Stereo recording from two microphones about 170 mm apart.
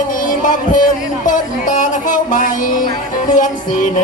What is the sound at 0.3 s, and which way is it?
Music, 50° left (ahead or behind).